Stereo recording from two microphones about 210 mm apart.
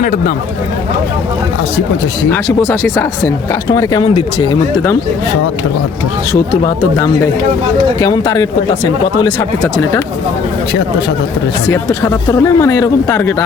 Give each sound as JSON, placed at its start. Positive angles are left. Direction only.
{"t": 2.3, "sound": "speech", "side_deg": 10}
{"t": 7.9, "sound": "speech", "side_deg": 15}
{"t": 11.7, "sound": "speech", "side_deg": 15}